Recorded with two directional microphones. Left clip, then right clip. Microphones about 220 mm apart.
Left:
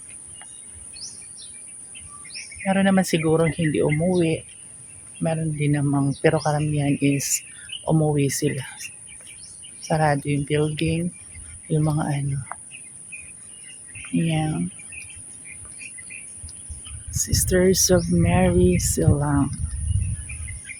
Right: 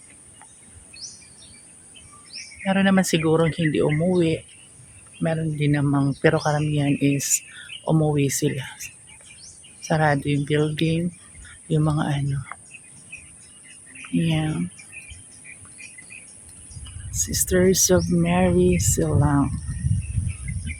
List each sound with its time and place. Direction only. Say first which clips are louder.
2.3 s speech: left 1 dB; centre (ahead or behind)
9.8 s speech: even; 10° right (ahead or behind)
12.5 s bird: left 2 dB; centre (ahead or behind)
14.2 s speech: even; 5° right (ahead or behind)
17.1 s speech: even; 5° right (ahead or behind)